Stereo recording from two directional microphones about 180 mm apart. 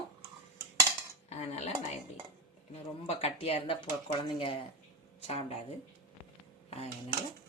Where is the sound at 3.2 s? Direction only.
35° left (ahead or behind).